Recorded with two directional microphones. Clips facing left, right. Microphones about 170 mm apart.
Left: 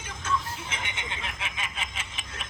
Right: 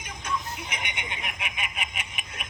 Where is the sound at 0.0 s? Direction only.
15° right (ahead or behind).